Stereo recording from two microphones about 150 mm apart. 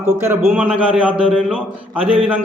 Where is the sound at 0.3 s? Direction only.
15° right (ahead or behind).